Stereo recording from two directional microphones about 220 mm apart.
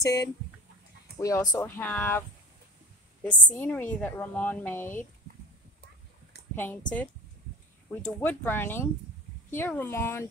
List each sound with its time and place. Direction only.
0.0 s a woman's voice: 15° left (ahead or behind)
3.3 s a woman's voice: 15° left (ahead or behind)
6.5 s a woman's voice: 10° left (ahead or behind)
8.0 s a woman's voice: 10° left (ahead or behind)